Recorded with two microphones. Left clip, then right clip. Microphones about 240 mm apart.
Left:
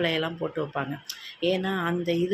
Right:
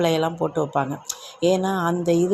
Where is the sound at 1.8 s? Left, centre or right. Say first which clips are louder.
Right 7 dB; centre.